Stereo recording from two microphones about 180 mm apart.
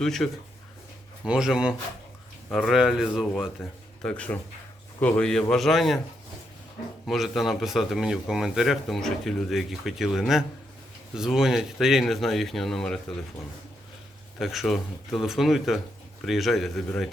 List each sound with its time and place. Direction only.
0.0 s speech: centre (ahead or behind)
7.1 s speech: centre (ahead or behind)
14.3 s speech: centre (ahead or behind)